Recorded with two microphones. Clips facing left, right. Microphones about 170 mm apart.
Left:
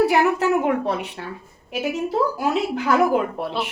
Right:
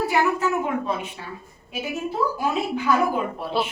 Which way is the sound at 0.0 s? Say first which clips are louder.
Left 4 dB; 70° left (ahead or behind).